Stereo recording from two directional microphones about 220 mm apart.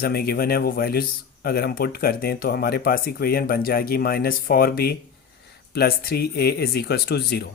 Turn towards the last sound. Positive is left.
turn(degrees=45)  # may be behind; listen again after turning